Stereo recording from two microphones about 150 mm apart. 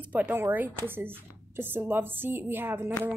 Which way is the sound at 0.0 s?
10° right (ahead or behind).